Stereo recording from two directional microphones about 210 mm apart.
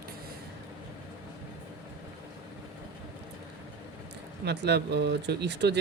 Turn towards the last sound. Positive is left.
turn(degrees=-55)  # may be behind; listen again after turning